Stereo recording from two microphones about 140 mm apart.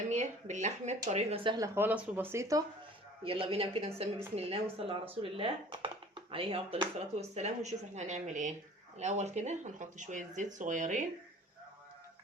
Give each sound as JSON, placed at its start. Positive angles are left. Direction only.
{"t": 0.1, "sound": "a woman's voice", "side_deg": -55}
{"t": 1.5, "sound": "speech", "side_deg": -25}
{"t": 3.2, "sound": "a woman's voice", "side_deg": -40}